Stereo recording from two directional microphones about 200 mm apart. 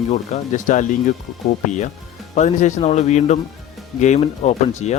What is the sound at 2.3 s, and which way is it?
Speech, 35° left (ahead or behind).